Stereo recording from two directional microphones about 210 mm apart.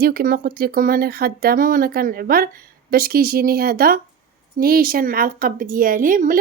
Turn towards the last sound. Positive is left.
turn(degrees=-40)  # may be behind; listen again after turning